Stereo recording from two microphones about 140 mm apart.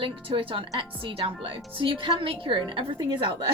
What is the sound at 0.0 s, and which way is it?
A woman's voice, 40° right (ahead or behind).